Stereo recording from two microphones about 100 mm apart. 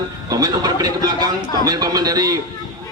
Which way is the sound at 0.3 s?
35° right (ahead or behind).